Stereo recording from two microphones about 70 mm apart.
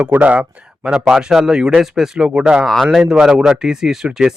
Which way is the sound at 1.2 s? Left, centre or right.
Centre.